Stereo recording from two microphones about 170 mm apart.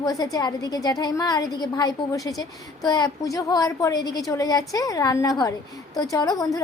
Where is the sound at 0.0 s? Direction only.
20° left (ahead or behind).